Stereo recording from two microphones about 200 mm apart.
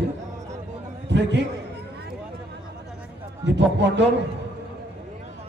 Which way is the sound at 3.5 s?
60° right (ahead or behind).